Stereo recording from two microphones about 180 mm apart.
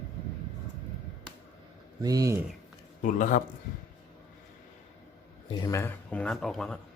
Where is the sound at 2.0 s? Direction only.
20° right (ahead or behind).